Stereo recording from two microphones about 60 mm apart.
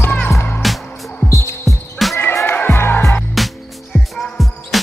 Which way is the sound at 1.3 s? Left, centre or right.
Left.